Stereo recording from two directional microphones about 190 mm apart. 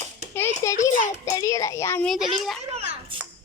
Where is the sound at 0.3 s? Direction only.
15° left (ahead or behind).